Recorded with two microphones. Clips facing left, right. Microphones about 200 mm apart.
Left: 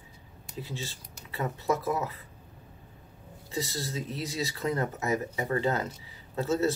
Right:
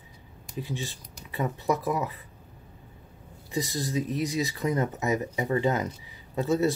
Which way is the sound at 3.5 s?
15° right (ahead or behind).